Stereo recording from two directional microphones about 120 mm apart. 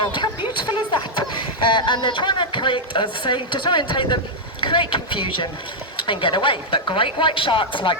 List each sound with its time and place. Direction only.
0.6 s a woman's voice: 40° left (ahead or behind)